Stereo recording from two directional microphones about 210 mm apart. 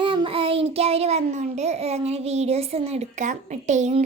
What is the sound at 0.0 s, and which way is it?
A child's voice, 25° right (ahead or behind).